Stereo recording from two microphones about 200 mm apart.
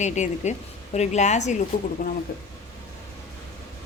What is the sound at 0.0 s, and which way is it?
A woman's voice, 35° left (ahead or behind).